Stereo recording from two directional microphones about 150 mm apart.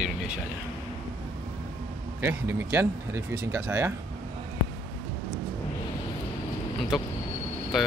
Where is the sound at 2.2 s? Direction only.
15° right (ahead or behind).